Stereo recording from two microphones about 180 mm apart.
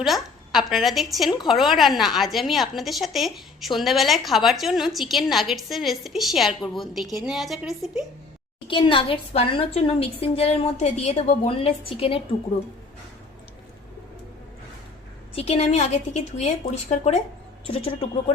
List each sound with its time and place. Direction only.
0.0 s a woman's voice: centre (ahead or behind)
8.6 s a woman's voice: 30° left (ahead or behind)
15.4 s a woman's voice: 35° left (ahead or behind)